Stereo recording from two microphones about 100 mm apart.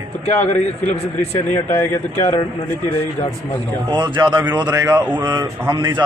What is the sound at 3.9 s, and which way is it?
A man's voice, 50° right (ahead or behind).